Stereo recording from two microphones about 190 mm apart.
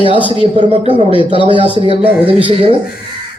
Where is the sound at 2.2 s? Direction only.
30° right (ahead or behind).